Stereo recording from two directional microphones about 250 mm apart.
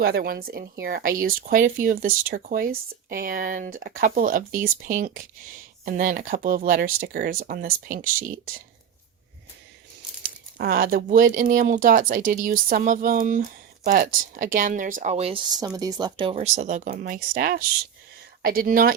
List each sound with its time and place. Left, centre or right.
0.0 s speech: right
10.6 s speech: right